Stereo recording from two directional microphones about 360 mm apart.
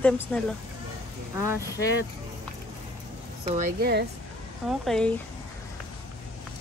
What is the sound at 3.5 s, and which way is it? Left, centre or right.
Speech, right.